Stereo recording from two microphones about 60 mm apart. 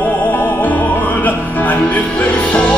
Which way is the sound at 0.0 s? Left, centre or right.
Left.